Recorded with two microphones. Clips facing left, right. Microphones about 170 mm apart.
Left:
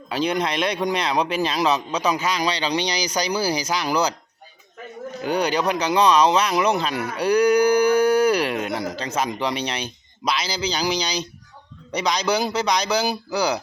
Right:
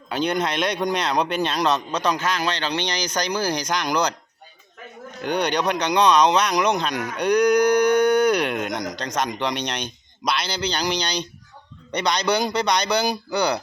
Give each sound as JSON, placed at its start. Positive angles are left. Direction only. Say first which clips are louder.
{"t": 0.1, "sound": "speech", "louder": "even", "side_deg": 0}
{"t": 5.2, "sound": "speech", "louder": "left 1 dB", "side_deg": 5}